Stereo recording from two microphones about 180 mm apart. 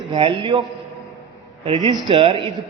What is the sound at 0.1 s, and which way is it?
Speech, 30° right (ahead or behind).